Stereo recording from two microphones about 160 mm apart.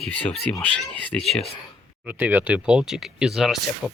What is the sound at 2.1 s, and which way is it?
Speech, 10° right (ahead or behind).